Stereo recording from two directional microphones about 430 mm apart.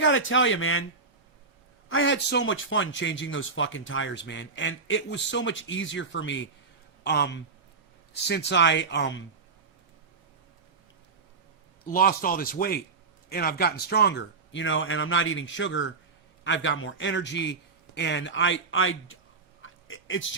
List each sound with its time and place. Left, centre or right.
0.0 s a man's voice: left
1.9 s a man's voice: left
11.9 s a man's voice: centre
19.6 s a sound: left